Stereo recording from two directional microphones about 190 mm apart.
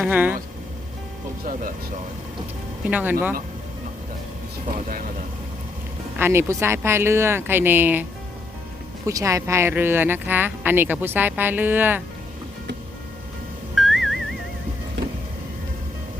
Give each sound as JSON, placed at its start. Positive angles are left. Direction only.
{"t": 0.0, "sound": "speech", "side_deg": -10}
{"t": 2.8, "sound": "speech", "side_deg": -10}
{"t": 4.7, "sound": "speech", "side_deg": -45}
{"t": 6.1, "sound": "speech", "side_deg": -10}
{"t": 9.0, "sound": "speech", "side_deg": -15}
{"t": 13.7, "sound": "music", "side_deg": 0}